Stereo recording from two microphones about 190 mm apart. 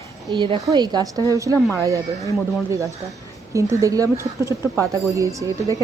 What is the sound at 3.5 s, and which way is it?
Speech, 15° right (ahead or behind).